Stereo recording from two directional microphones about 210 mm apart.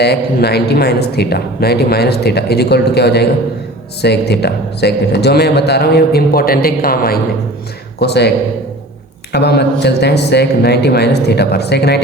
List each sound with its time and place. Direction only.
0.0 s speech: 50° left (ahead or behind)
9.3 s speech: 50° left (ahead or behind)